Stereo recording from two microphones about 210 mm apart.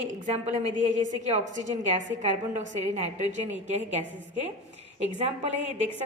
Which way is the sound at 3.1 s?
35° right (ahead or behind).